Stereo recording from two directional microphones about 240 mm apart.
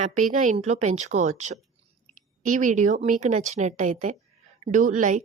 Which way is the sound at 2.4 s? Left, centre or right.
Right.